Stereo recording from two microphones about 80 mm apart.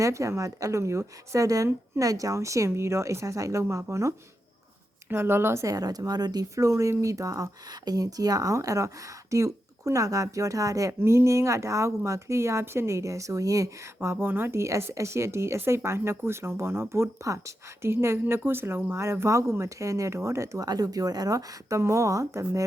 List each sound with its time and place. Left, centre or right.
0.0 s speech: right
5.7 s speech: right
21.8 s speech: right